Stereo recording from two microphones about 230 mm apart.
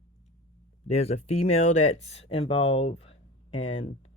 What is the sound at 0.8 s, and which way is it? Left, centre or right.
Speech, left.